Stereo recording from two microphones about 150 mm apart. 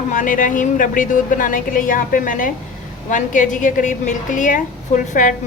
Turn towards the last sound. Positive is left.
turn(degrees=55)  # may be behind; listen again after turning